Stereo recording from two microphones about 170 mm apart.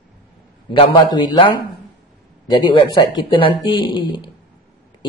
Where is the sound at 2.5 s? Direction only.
25° left (ahead or behind).